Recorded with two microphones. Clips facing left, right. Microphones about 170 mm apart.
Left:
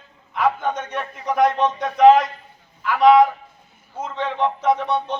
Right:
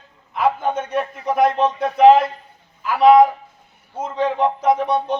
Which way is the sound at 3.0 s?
35° right (ahead or behind).